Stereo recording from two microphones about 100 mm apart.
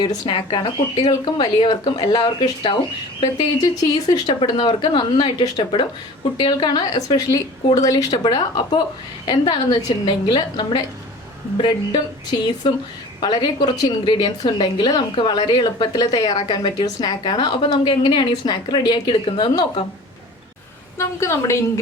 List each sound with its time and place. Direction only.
0.0 s a woman's voice: 45° left (ahead or behind)
0.3 s speech: 65° left (ahead or behind)
0.9 s a woman's voice: 45° left (ahead or behind)
4.4 s a woman's voice: 55° left (ahead or behind)
21.0 s a woman's voice: 30° left (ahead or behind)